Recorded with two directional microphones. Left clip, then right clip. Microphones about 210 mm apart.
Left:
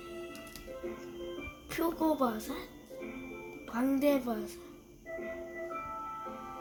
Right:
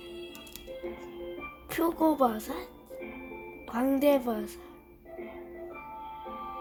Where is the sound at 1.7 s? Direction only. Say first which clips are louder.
Right 4 dB; 50° right (ahead or behind).